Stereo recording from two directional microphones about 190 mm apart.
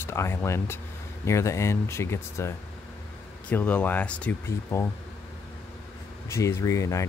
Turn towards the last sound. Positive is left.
turn(degrees=15)  # may be behind; listen again after turning